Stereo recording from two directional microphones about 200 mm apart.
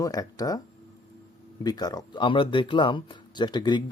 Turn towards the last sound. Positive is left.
turn(degrees=20)  # may be behind; listen again after turning